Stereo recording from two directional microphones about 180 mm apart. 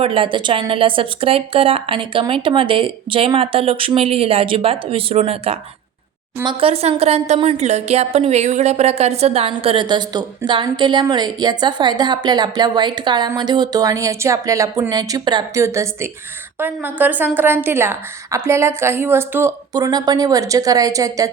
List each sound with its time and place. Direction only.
0.0 s a woman's voice: 30° right (ahead or behind)